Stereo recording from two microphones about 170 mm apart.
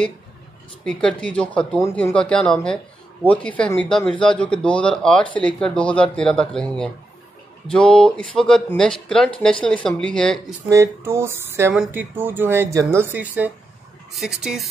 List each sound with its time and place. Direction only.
0.8 s speech: 5° left (ahead or behind)
10.7 s speech: 15° right (ahead or behind)